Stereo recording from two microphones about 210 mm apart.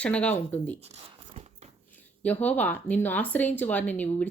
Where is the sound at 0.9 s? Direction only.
30° right (ahead or behind).